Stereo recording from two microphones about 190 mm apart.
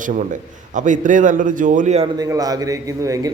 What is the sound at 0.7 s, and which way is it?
A man's voice, 40° right (ahead or behind).